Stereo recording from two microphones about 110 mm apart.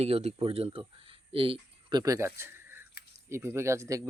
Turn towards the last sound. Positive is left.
turn(degrees=-30)  # may be behind; listen again after turning